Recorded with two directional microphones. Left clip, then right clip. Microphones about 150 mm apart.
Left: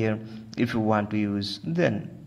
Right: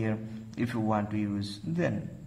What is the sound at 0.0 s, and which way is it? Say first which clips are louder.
A man's voice: left 6 dB; 35° left (ahead or behind).